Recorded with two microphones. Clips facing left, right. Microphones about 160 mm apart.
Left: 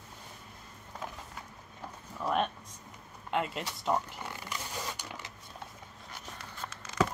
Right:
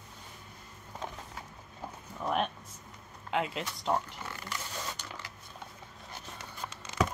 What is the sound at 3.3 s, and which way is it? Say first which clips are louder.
Speech: even; centre (ahead or behind).